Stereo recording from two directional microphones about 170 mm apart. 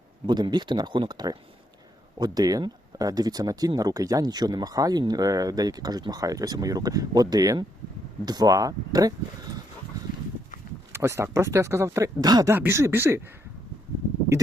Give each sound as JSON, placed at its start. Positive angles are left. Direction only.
{"t": 0.3, "sound": "speech", "side_deg": -25}
{"t": 10.9, "sound": "speech", "side_deg": -15}